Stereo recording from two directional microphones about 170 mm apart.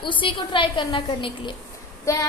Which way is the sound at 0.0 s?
30° left (ahead or behind).